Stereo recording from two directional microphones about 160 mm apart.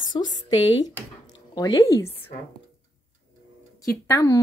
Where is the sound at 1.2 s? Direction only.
25° left (ahead or behind).